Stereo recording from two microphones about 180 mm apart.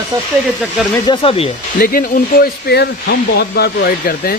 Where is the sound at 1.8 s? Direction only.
50° left (ahead or behind).